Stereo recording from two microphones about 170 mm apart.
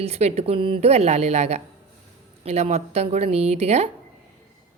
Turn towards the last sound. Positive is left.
turn(degrees=-40)  # may be behind; listen again after turning